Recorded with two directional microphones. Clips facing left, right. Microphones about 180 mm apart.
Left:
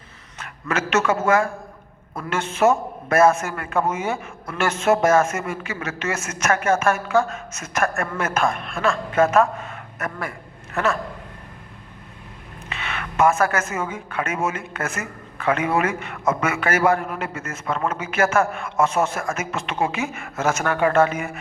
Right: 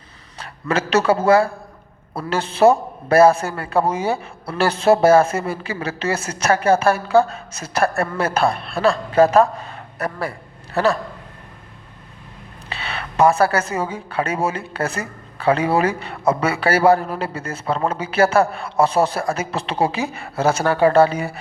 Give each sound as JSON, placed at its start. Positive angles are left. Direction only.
{"t": 0.3, "sound": "a woman's voice", "side_deg": -35}
{"t": 12.6, "sound": "a woman's voice", "side_deg": -35}